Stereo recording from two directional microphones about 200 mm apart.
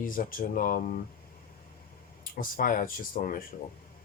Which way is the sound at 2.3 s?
45° left (ahead or behind).